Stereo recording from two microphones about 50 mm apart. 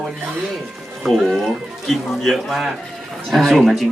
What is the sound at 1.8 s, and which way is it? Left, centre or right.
A man's voice, centre.